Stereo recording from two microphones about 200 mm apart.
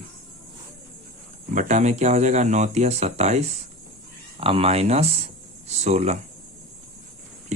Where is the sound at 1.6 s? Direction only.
35° right (ahead or behind).